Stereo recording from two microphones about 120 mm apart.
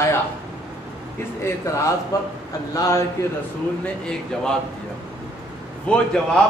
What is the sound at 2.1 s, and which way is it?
Speech, 30° left (ahead or behind).